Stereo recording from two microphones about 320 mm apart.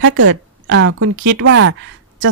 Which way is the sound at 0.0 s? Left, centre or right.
Right.